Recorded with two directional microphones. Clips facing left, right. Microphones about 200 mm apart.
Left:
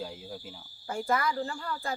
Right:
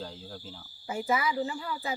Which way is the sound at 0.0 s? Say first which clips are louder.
Left 2 dB; 10° left (ahead or behind).